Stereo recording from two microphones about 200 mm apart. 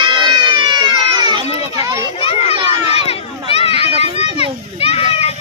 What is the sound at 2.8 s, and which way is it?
Run, 30° left (ahead or behind).